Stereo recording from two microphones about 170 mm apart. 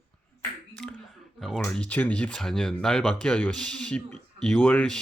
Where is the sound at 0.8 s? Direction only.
5° left (ahead or behind).